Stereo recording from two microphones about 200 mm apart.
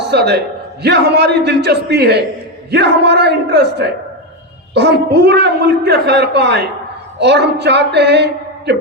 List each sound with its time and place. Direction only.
0.0 s a man's voice: 55° right (ahead or behind)